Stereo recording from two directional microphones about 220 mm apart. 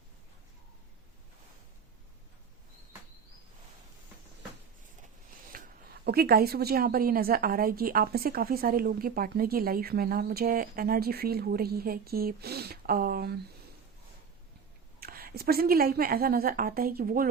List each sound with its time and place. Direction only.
5.5 s a woman's voice: 40° right (ahead or behind)
15.0 s a woman's voice: 45° right (ahead or behind)